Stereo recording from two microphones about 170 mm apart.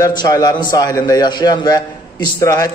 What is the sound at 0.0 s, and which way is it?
A man's voice, 20° left (ahead or behind).